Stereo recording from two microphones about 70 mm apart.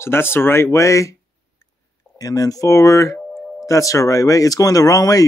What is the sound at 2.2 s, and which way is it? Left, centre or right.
Speech, left.